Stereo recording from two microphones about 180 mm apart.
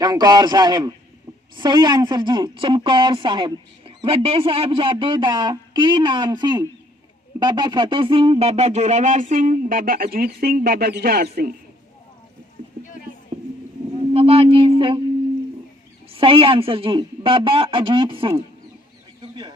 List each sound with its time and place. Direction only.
0.0 s a woman's voice: 20° right (ahead or behind); by 11.5 s 55° right (ahead or behind)
13.3 s a sound: 40° right (ahead or behind)
16.0 s a woman's voice: 30° right (ahead or behind)
19.2 s chicken: 25° right (ahead or behind)